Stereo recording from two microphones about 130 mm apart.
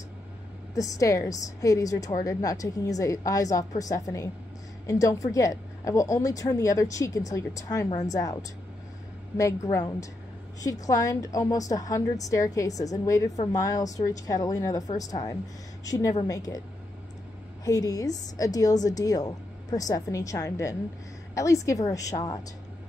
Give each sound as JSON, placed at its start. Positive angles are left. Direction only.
{"t": 0.7, "sound": "a woman's voice", "side_deg": 25}
{"t": 17.6, "sound": "a woman's voice", "side_deg": 25}